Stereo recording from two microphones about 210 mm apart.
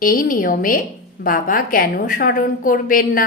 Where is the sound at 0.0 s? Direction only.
40° left (ahead or behind).